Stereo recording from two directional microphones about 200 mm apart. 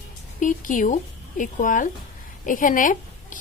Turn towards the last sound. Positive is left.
turn(degrees=40)  # may be behind; listen again after turning